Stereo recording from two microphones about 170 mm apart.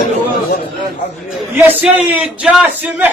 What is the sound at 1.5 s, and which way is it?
A man's voice, 10° right (ahead or behind).